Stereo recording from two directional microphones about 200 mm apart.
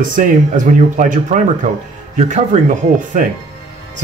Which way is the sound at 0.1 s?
40° right (ahead or behind).